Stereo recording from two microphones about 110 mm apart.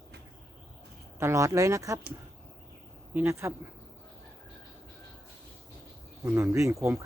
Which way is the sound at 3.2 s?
25° right (ahead or behind).